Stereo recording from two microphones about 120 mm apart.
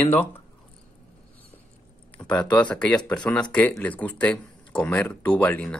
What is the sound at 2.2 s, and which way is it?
Speech, 10° left (ahead or behind).